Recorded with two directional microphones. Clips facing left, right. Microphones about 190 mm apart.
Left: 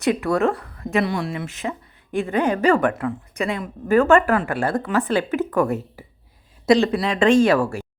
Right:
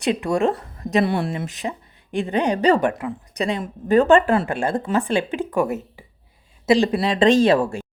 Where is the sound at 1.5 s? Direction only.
15° right (ahead or behind).